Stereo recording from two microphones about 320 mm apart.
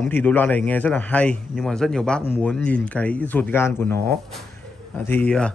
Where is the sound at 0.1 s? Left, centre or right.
Centre.